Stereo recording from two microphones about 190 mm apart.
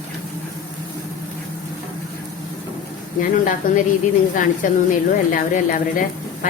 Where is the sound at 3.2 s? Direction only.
45° left (ahead or behind).